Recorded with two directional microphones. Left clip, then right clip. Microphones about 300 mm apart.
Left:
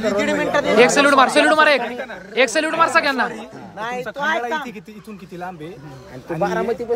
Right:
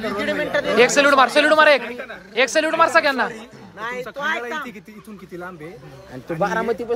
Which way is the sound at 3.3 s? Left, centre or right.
Left.